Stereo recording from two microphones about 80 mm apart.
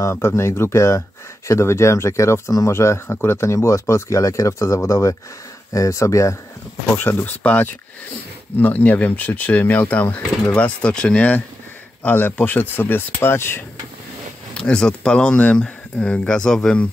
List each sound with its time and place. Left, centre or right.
0.1 s speech: left
7.0 s speech: left
14.5 s speech: centre